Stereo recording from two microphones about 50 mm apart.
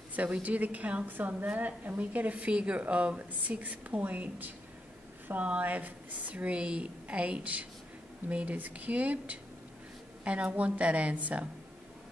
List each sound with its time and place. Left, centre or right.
0.1 s a woman's voice: right